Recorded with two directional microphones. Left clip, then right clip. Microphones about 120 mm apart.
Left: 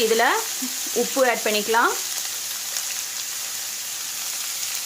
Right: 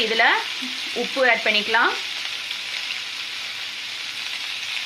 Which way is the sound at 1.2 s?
60° left (ahead or behind).